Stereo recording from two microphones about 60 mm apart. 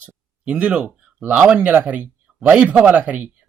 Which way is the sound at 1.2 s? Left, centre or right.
Right.